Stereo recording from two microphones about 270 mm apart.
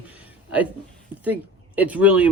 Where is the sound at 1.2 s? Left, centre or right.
Centre.